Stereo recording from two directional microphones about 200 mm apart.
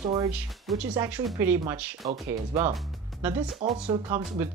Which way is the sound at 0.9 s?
15° right (ahead or behind).